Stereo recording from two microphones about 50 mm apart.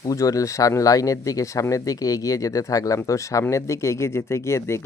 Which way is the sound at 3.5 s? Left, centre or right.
Left.